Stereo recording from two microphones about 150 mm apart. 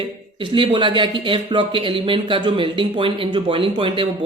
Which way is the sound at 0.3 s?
35° right (ahead or behind).